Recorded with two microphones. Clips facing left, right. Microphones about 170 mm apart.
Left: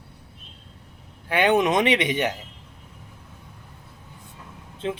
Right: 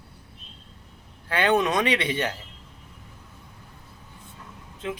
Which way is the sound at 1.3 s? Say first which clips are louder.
Left 3 dB; 20° left (ahead or behind).